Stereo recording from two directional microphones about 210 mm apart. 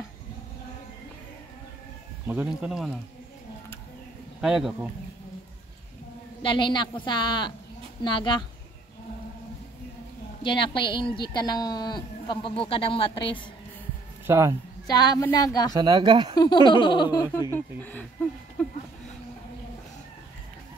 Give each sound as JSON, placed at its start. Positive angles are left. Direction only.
{"t": 2.2, "sound": "speech", "side_deg": -5}
{"t": 4.4, "sound": "speech", "side_deg": 0}
{"t": 6.4, "sound": "a woman's voice", "side_deg": 25}
{"t": 10.4, "sound": "a woman's voice", "side_deg": 25}
{"t": 14.2, "sound": "speech", "side_deg": -15}
{"t": 14.9, "sound": "speech", "side_deg": 20}
{"t": 15.7, "sound": "speech", "side_deg": -20}
{"t": 16.3, "sound": "a woman's voice", "side_deg": 20}
{"t": 18.6, "sound": "a sound", "side_deg": 5}